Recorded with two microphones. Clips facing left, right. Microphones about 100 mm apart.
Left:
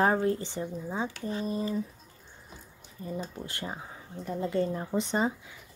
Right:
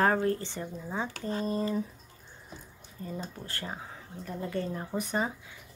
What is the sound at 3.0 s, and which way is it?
Speech, 15° left (ahead or behind).